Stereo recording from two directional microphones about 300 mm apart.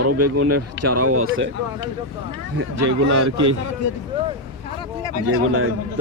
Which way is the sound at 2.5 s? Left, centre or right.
Right.